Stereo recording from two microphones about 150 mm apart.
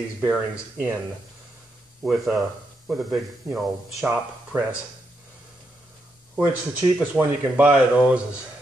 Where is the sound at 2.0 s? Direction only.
5° right (ahead or behind).